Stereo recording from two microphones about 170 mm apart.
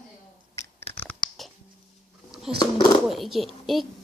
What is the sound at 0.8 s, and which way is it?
Scratch, 35° left (ahead or behind).